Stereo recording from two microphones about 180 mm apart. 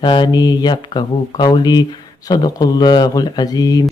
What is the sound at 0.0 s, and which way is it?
Mantra, 25° left (ahead or behind).